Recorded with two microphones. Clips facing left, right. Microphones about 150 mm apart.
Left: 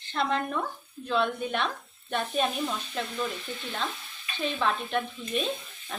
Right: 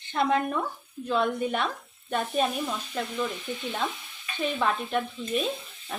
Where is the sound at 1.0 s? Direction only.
5° right (ahead or behind).